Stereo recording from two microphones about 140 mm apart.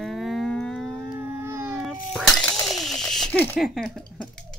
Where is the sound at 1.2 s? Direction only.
15° right (ahead or behind).